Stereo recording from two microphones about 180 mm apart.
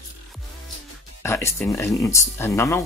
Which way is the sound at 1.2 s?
15° left (ahead or behind).